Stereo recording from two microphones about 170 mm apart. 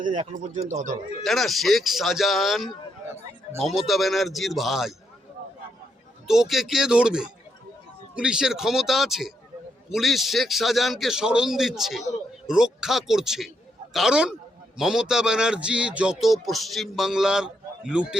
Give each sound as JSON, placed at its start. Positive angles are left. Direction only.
{"t": 0.0, "sound": "speech", "side_deg": -50}
{"t": 1.2, "sound": "a man's voice", "side_deg": 0}
{"t": 6.2, "sound": "a man's voice", "side_deg": -5}